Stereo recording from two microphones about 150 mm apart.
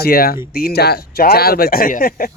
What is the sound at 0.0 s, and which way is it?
Speech, 90° left.